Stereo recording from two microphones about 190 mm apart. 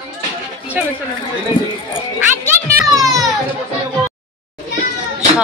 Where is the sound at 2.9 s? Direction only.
20° right (ahead or behind).